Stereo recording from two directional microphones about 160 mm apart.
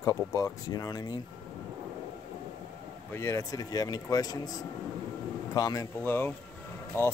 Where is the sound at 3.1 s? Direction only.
20° left (ahead or behind).